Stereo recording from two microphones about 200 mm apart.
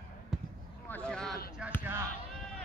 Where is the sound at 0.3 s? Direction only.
Centre (ahead or behind).